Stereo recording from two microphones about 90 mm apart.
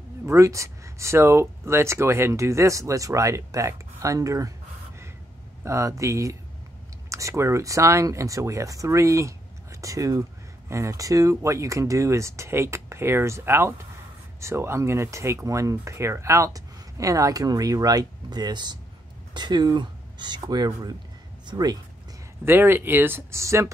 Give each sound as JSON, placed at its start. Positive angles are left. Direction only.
{"t": 0.3, "sound": "speech", "side_deg": -35}
{"t": 5.6, "sound": "speech", "side_deg": -35}
{"t": 22.4, "sound": "speech", "side_deg": -25}